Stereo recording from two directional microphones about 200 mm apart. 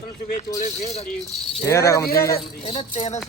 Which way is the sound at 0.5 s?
35° left (ahead or behind).